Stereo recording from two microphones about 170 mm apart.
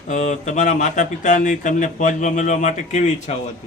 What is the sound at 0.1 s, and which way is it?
Speech, 45° left (ahead or behind).